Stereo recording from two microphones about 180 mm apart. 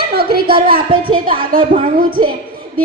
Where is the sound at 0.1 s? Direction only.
60° right (ahead or behind).